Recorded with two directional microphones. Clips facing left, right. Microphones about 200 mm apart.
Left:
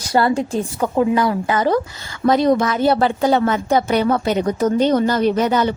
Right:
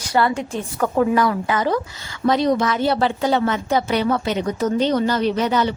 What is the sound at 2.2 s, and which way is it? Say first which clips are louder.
A woman's voice: left 3 dB; 50° left (ahead or behind).